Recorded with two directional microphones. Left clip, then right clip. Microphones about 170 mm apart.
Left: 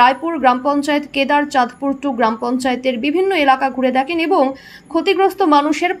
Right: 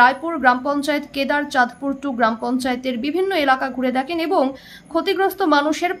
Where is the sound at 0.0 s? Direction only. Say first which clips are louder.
Left 2 dB; 15° left (ahead or behind).